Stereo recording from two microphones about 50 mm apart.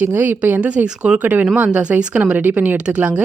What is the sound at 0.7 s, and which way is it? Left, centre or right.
Speech, right.